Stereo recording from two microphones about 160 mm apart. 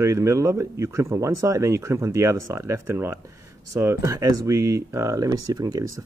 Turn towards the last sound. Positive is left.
turn(degrees=-20)  # may be behind; listen again after turning